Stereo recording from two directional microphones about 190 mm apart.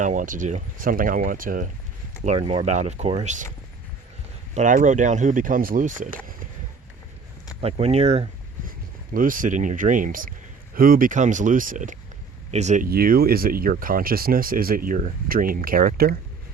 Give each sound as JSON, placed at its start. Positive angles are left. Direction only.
{"t": 0.0, "sound": "speech", "side_deg": -40}
{"t": 2.2, "sound": "speech", "side_deg": -35}
{"t": 4.5, "sound": "speech", "side_deg": -40}
{"t": 7.6, "sound": "speech", "side_deg": -35}
{"t": 9.1, "sound": "speech", "side_deg": -45}